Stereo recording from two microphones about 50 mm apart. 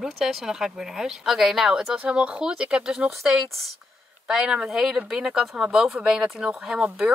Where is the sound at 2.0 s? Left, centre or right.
Right; by 3.7 s centre.